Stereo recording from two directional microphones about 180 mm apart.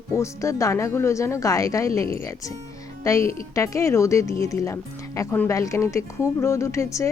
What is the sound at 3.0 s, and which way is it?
Speech, 15° left (ahead or behind).